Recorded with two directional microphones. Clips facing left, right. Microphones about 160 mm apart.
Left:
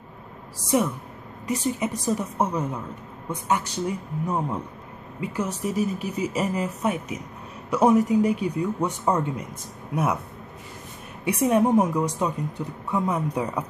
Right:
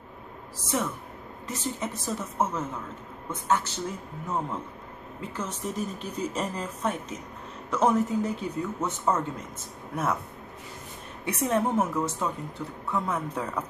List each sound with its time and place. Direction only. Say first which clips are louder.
0.6 s speech: left 7 dB; 15° left (ahead or behind)
5.2 s speech: left 6 dB; 10° left (ahead or behind)
11.2 s speech: left 6 dB; 15° left (ahead or behind)